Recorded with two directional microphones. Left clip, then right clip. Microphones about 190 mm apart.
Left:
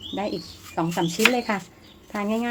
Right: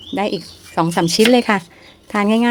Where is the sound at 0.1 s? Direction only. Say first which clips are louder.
Right 9 dB; 45° right (ahead or behind).